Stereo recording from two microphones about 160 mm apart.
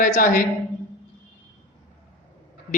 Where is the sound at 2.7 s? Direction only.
55° left (ahead or behind).